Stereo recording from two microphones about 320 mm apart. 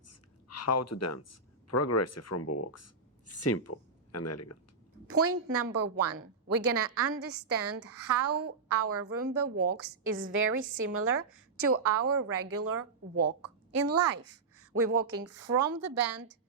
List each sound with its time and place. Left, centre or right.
0.1 s speech: left
5.0 s a woman's voice: right